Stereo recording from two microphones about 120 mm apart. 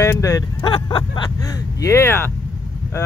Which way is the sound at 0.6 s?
40° left (ahead or behind).